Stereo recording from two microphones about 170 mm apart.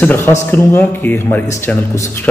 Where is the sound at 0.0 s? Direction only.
15° left (ahead or behind).